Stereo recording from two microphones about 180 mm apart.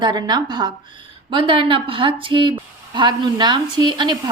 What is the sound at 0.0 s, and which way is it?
Speech, 25° right (ahead or behind).